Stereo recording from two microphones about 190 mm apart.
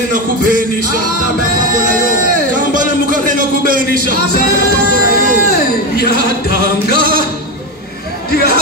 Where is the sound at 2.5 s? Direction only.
45° right (ahead or behind).